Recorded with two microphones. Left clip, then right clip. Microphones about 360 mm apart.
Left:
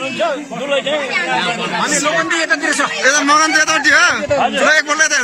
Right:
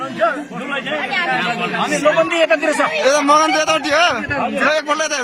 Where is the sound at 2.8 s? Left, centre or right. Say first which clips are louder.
Left 1 dB; centre.